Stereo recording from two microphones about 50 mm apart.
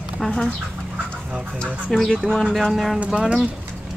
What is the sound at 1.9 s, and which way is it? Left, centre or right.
Bird, centre.